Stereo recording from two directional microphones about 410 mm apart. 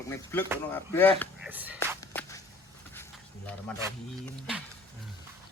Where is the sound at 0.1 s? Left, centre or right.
Centre.